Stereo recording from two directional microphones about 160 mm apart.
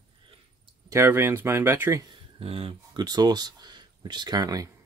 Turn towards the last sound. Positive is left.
turn(degrees=-25)  # may be behind; listen again after turning